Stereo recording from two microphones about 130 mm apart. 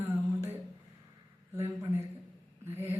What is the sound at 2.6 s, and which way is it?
Speech, 20° right (ahead or behind).